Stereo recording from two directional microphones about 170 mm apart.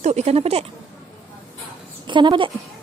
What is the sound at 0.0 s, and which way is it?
Speech, 40° right (ahead or behind).